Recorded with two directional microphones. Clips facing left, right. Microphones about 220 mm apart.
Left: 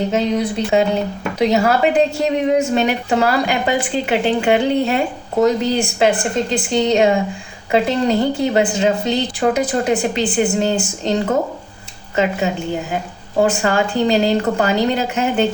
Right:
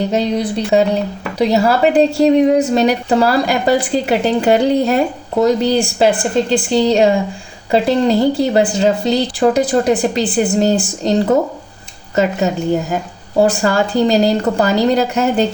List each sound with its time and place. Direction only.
0.1 s a woman's voice: 35° right (ahead or behind)